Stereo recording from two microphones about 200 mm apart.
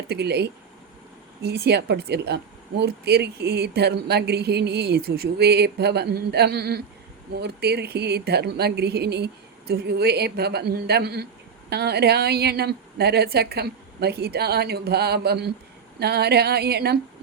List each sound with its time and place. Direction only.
0.1 s a woman's voice: 55° right (ahead or behind)